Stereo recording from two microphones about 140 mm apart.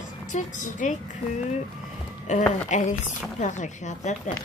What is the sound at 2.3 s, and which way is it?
A woman's voice, 60° left (ahead or behind).